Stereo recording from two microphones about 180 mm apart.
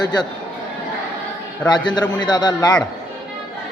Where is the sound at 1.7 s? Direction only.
25° left (ahead or behind).